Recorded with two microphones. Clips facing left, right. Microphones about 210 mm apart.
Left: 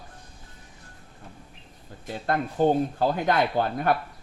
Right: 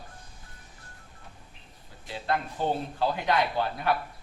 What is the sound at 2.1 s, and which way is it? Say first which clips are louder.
Speech: left 3 dB; 50° left (ahead or behind).